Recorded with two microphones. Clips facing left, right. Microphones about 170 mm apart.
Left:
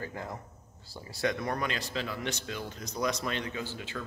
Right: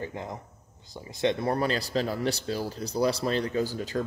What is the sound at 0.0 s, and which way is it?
A man's voice, 20° right (ahead or behind).